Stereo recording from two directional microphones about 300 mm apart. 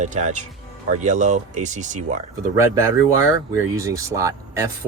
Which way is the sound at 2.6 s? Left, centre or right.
Centre.